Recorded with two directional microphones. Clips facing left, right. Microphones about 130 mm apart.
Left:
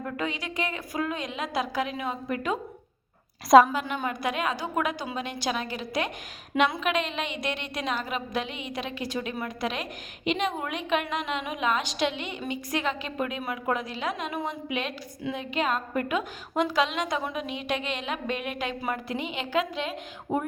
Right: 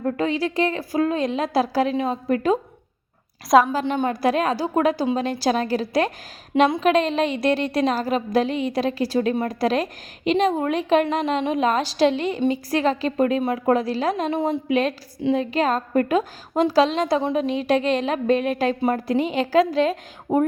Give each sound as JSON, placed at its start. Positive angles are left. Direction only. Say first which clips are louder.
{"t": 0.0, "sound": "a woman's voice", "louder": "right 9 dB", "side_deg": -35}
{"t": 3.7, "sound": "a woman's voice", "louder": "right 7 dB", "side_deg": -30}
{"t": 6.5, "sound": "a woman's voice", "louder": "right 8 dB", "side_deg": -25}
{"t": 14.7, "sound": "a woman's voice", "louder": "right 10 dB", "side_deg": -40}